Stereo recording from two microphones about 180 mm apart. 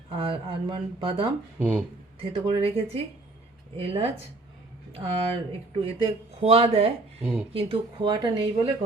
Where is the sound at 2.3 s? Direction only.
30° right (ahead or behind).